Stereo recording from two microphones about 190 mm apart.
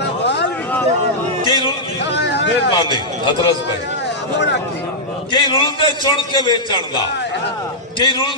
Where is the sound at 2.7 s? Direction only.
25° left (ahead or behind).